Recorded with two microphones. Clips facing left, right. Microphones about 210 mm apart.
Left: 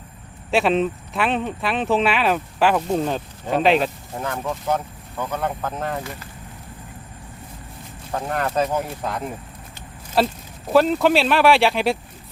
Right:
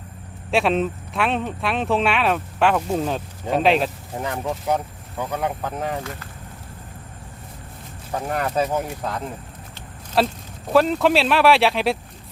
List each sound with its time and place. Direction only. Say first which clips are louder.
0.5 s speech: left 1 dB; centre (ahead or behind)
4.2 s speech: even; 15° right (ahead or behind)
8.1 s speech: even; 5° right (ahead or behind)